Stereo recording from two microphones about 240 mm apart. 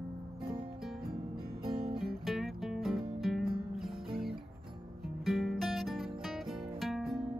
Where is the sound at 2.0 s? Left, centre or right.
Centre.